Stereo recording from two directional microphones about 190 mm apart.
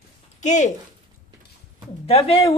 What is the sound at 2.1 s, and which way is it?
Speech, 30° left (ahead or behind).